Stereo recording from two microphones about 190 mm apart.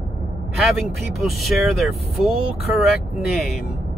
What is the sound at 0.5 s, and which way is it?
Speech, centre (ahead or behind).